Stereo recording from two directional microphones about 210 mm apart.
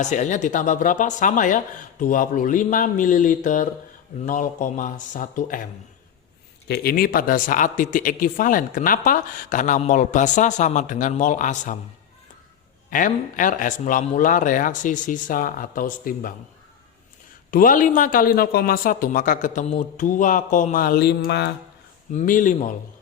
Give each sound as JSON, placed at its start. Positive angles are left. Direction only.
{"t": 0.0, "sound": "speech", "side_deg": 35}
{"t": 6.7, "sound": "speech", "side_deg": 50}
{"t": 12.9, "sound": "speech", "side_deg": 40}
{"t": 17.5, "sound": "speech", "side_deg": 40}
{"t": 22.1, "sound": "speech", "side_deg": 35}